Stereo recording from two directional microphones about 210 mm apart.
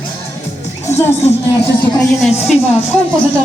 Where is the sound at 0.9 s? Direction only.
15° left (ahead or behind).